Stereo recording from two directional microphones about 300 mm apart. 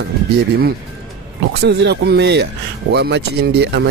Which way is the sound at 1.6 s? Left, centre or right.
Right.